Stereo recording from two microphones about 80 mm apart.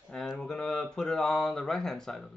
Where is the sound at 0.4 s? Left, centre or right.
Centre.